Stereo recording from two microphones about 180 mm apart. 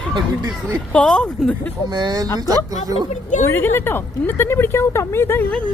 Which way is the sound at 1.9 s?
25° right (ahead or behind).